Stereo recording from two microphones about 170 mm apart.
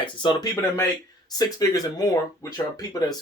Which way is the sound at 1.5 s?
20° left (ahead or behind).